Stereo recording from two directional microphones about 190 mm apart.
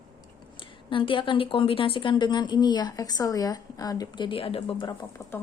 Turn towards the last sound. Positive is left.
turn(degrees=0)  # may be behind; listen again after turning